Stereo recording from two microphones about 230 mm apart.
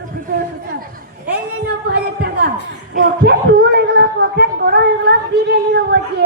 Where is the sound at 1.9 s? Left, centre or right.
Right.